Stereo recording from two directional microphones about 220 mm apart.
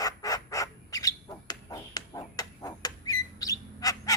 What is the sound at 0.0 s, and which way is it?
Bird, 15° left (ahead or behind).